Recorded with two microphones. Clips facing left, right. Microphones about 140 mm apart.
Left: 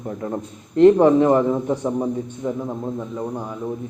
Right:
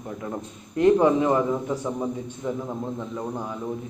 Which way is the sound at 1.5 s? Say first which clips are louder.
Left 5 dB; 25° left (ahead or behind).